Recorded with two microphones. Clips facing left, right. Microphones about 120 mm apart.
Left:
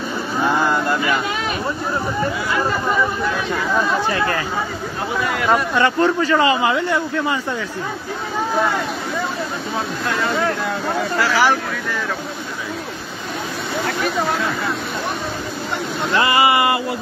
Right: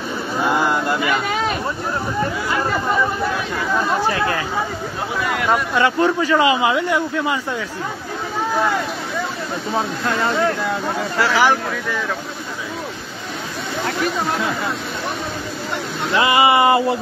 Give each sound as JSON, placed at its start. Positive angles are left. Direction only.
{"t": 5.5, "sound": "speech", "side_deg": -10}
{"t": 11.1, "sound": "speech", "side_deg": -20}
{"t": 16.2, "sound": "speech", "side_deg": -20}